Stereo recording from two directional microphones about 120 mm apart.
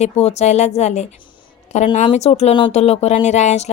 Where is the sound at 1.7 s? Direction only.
80° left.